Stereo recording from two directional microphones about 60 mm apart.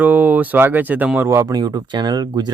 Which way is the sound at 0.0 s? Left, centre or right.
Right.